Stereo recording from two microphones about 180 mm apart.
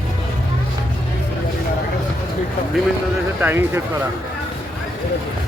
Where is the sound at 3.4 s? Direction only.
10° right (ahead or behind).